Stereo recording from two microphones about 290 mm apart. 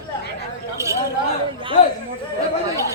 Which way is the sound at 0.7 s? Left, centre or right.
Centre.